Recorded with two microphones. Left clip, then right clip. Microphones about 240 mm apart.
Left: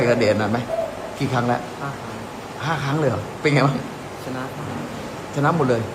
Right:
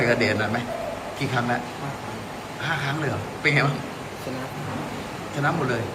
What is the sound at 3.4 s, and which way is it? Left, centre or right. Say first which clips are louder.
Speech: left 2 dB; centre.